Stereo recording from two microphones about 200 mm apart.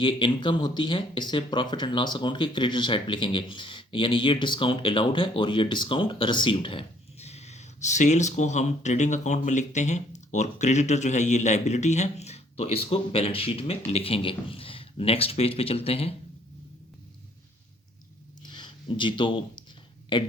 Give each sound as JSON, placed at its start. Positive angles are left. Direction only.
{"t": 0.0, "sound": "speech", "side_deg": 25}
{"t": 18.4, "sound": "a sound", "side_deg": 20}
{"t": 20.1, "sound": "speech", "side_deg": 25}